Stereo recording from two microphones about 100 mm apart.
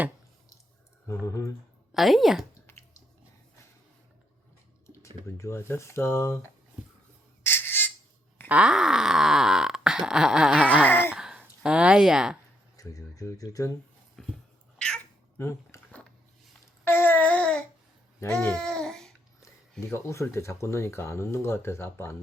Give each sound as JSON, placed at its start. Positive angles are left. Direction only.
{"t": 1.2, "sound": "speech", "side_deg": 35}
{"t": 1.9, "sound": "a woman's voice", "side_deg": 0}
{"t": 2.6, "sound": "a sound", "side_deg": 25}
{"t": 4.9, "sound": "speech", "side_deg": 30}
{"t": 7.4, "sound": "squawk", "side_deg": 20}
{"t": 8.4, "sound": "groan", "side_deg": -10}
{"t": 10.8, "sound": "speech", "side_deg": 20}
{"t": 11.1, "sound": "sigh", "side_deg": -5}
{"t": 11.6, "sound": "groan", "side_deg": -10}
{"t": 12.7, "sound": "speech", "side_deg": 35}
{"t": 14.2, "sound": "a sound", "side_deg": 5}
{"t": 15.4, "sound": "speech", "side_deg": 30}
{"t": 16.8, "sound": "babbling", "side_deg": 20}
{"t": 19.8, "sound": "speech", "side_deg": 30}